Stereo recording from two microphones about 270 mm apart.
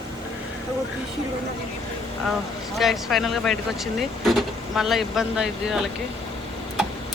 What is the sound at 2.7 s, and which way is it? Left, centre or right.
Speech, centre.